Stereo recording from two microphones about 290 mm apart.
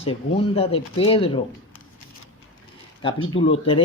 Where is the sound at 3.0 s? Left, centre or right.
Centre.